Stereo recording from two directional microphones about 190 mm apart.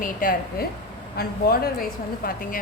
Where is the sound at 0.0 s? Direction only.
45° left (ahead or behind).